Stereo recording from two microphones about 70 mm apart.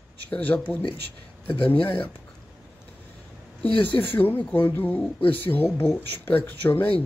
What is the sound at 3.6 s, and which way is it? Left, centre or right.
Speech, left.